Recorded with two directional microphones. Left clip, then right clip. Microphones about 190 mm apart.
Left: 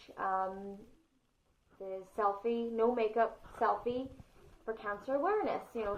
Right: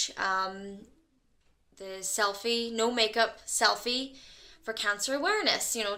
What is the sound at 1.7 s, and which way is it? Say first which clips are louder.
A woman's voice: right 6 dB; 30° right (ahead or behind).